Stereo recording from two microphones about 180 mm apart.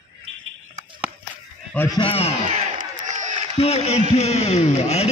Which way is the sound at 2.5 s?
45° right (ahead or behind).